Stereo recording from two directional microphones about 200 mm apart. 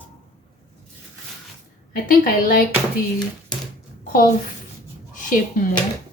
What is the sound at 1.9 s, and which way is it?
Speech, 45° left (ahead or behind).